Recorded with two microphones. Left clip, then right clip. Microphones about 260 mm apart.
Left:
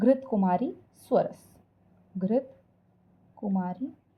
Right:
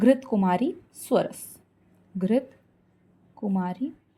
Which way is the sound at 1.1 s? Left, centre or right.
Right.